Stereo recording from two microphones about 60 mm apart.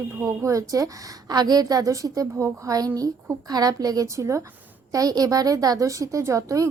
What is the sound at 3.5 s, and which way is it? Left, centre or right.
Speech, right.